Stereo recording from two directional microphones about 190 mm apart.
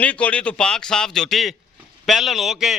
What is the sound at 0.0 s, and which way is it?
A man's voice, 5° left (ahead or behind).